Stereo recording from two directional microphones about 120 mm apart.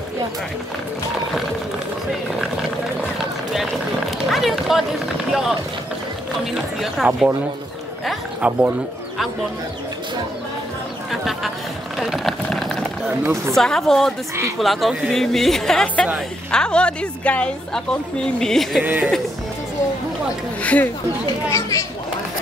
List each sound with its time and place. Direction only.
3.5 s speech: centre (ahead or behind)
8.4 s speech: 10° right (ahead or behind)
11.1 s speech: centre (ahead or behind)
12.0 s run: centre (ahead or behind)
13.2 s speech: 25° right (ahead or behind)
13.6 s a woman's voice: 5° left (ahead or behind)
18.8 s speech: 15° right (ahead or behind)
20.6 s a woman's voice: 10° left (ahead or behind)
21.5 s speech: 25° left (ahead or behind)